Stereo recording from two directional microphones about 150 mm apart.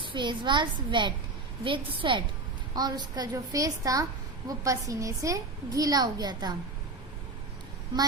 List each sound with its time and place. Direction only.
0.1 s a child's voice: 30° right (ahead or behind)